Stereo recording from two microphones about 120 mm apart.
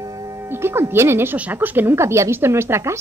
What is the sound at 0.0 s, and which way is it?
Speech, 30° right (ahead or behind).